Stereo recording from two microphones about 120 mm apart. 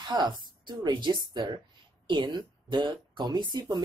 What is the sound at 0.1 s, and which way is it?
Speech, 40° right (ahead or behind).